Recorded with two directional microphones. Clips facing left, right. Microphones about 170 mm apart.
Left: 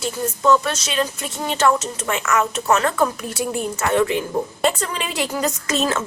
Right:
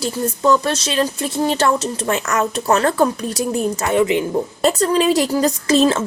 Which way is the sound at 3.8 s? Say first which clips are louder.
Right 1 dB; 15° right (ahead or behind).